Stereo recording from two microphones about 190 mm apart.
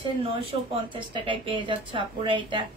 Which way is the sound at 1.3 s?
25° right (ahead or behind).